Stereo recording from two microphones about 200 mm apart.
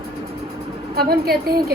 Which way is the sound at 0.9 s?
50° right (ahead or behind).